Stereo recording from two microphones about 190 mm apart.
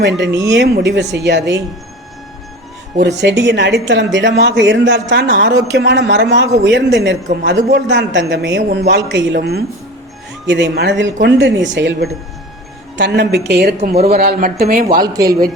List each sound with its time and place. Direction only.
0.3 s speech: 15° right (ahead or behind)
0.5 s speech: 65° right (ahead or behind)
3.0 s speech: 65° right (ahead or behind)
10.4 s speech: 70° right (ahead or behind); by 14.9 s 50° right (ahead or behind)
14.9 s speech: 20° right (ahead or behind)